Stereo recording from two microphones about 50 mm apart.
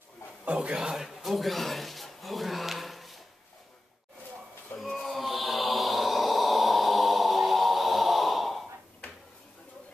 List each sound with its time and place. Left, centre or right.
0.5 s a man's voice: right
0.7 s speech: centre
4.7 s music: centre